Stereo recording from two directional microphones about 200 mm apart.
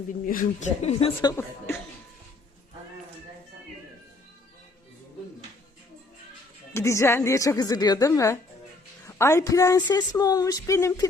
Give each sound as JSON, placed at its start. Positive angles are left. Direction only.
{"t": 0.3, "sound": "speech", "side_deg": 45}
{"t": 1.3, "sound": "a woman's voice", "side_deg": 10}
{"t": 6.7, "sound": "a woman's voice", "side_deg": 15}